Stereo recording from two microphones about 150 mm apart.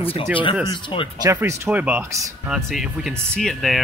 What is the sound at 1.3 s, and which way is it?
Speech, 20° right (ahead or behind).